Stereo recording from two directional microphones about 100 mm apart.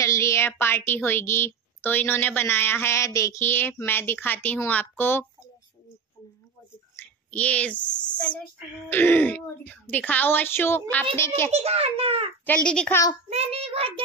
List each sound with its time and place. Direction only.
0.0 s a woman's voice: 30° left (ahead or behind)
7.0 s a woman's voice: 15° left (ahead or behind)
11.5 s a child's voice: 90° right
12.4 s speech: 10° left (ahead or behind)
13.3 s a child's voice: 85° right; by 14.0 s 70° right (ahead or behind)